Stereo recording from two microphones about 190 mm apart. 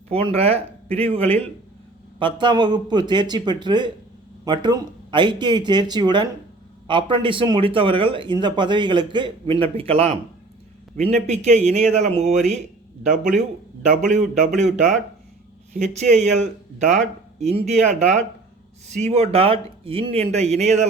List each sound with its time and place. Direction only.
0.1 s a man's voice: 30° right (ahead or behind)
11.3 s speech: 35° right (ahead or behind)